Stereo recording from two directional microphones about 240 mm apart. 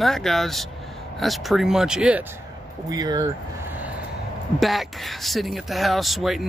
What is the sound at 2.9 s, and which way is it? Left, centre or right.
Speech, centre.